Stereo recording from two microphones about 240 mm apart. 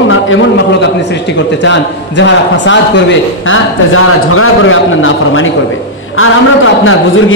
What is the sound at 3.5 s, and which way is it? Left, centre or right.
A man's voice, left.